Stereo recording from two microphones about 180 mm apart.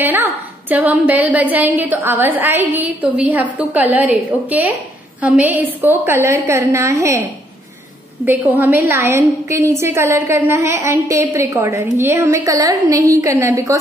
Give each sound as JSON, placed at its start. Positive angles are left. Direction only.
{"t": 0.0, "sound": "a woman's voice", "side_deg": -10}
{"t": 8.3, "sound": "a woman's voice", "side_deg": -10}